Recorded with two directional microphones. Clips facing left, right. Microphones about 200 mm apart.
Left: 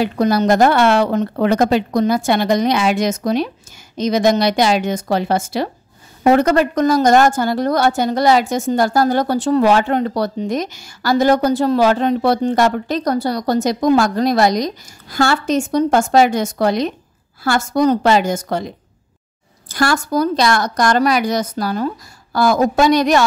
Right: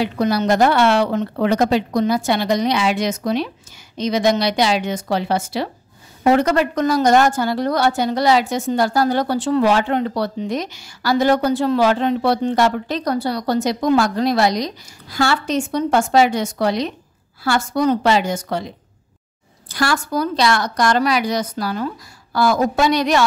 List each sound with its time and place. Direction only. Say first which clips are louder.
0.0 s a woman's voice: left 3 dB; 45° left (ahead or behind)
19.7 s a woman's voice: left 3 dB; 45° left (ahead or behind)